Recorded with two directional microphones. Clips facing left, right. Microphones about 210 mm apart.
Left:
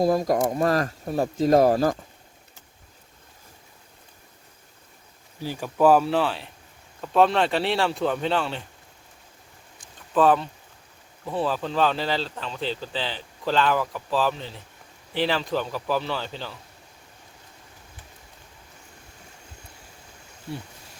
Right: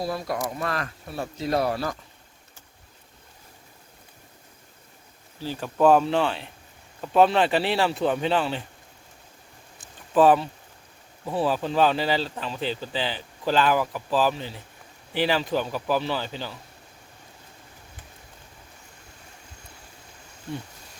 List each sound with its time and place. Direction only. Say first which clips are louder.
0.0 s speech: left 8 dB; 45° left (ahead or behind)
5.4 s speech: even; 10° left (ahead or behind)
9.8 s a sound: right 2 dB; 5° right (ahead or behind)
11.3 s speech: right 1 dB; 5° right (ahead or behind)